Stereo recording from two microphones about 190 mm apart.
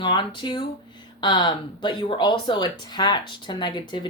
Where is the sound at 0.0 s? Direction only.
25° left (ahead or behind).